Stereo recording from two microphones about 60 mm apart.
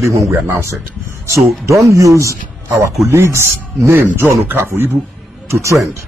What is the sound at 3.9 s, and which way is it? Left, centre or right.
Speech, right.